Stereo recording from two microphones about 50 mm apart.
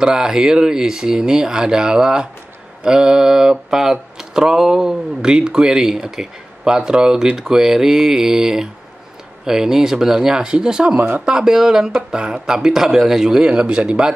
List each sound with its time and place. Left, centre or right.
0.0 s speech: centre
11.0 s speech: right
11.2 s speech: centre